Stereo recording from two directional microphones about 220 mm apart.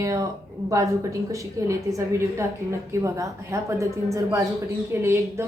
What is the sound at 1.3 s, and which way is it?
A woman's voice, 15° right (ahead or behind).